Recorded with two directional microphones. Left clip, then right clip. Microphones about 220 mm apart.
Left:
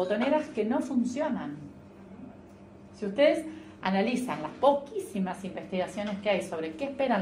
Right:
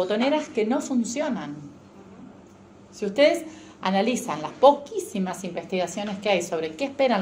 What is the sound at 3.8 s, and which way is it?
A woman's voice, 20° right (ahead or behind).